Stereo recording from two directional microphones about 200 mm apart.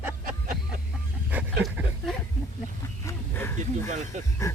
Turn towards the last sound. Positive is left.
turn(degrees=15)  # may be behind; listen again after turning